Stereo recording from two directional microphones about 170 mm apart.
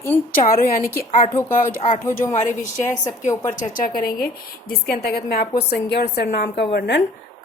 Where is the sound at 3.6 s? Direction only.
55° left (ahead or behind); by 7.0 s 75° left (ahead or behind).